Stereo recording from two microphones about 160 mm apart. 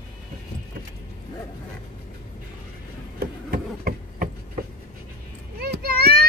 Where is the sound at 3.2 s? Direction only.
70° right (ahead or behind).